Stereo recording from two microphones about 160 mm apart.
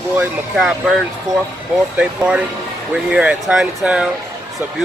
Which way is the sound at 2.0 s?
5° right (ahead or behind).